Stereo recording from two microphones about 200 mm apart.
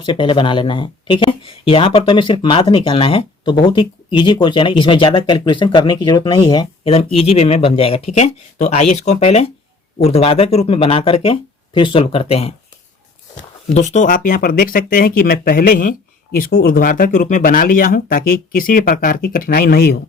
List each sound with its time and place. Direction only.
0.0 s speech: 25° left (ahead or behind)
13.7 s speech: 35° left (ahead or behind)